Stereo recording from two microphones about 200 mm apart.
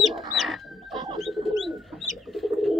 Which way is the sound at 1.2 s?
Centre (ahead or behind).